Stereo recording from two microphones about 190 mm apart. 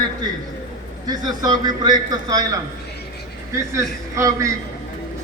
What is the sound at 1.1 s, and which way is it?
A man's voice, 20° right (ahead or behind).